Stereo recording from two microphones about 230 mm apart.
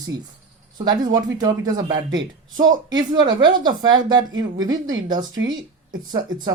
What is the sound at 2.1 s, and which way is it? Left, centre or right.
Speech, right.